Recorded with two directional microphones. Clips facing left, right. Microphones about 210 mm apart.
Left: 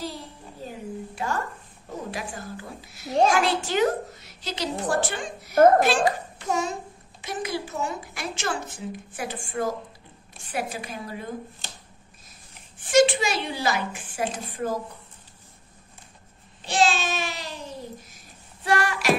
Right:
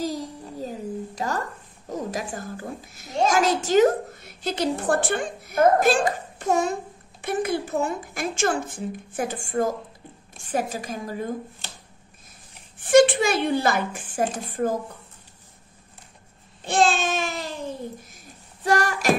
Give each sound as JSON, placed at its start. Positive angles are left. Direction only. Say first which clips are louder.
{"t": 0.0, "sound": "a sound", "louder": "right 7 dB", "side_deg": -40}
{"t": 1.9, "sound": "a woman's voice", "louder": "right 4 dB", "side_deg": -40}
{"t": 12.7, "sound": "a woman's voice", "louder": "right 3 dB", "side_deg": -55}
{"t": 16.6, "sound": "babbling", "louder": "right 2 dB", "side_deg": -55}